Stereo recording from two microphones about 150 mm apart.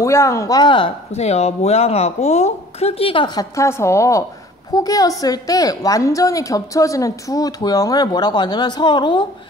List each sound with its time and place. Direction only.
0.0 s a woman's voice: 20° left (ahead or behind)